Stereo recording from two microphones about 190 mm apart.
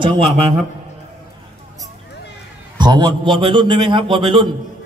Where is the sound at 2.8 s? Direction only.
20° right (ahead or behind).